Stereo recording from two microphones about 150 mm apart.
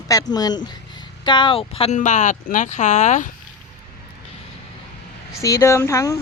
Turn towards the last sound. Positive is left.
turn(degrees=20)  # may be behind; listen again after turning